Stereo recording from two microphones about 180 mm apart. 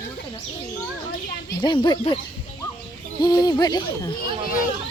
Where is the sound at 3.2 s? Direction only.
20° left (ahead or behind).